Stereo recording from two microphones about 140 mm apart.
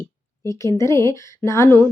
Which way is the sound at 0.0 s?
20° left (ahead or behind).